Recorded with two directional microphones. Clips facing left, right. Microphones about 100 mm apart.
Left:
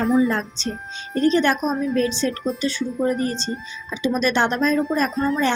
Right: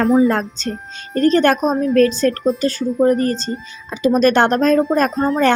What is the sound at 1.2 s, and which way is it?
Speech, 50° right (ahead or behind).